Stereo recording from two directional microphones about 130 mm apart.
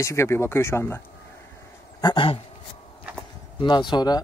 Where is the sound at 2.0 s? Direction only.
40° left (ahead or behind).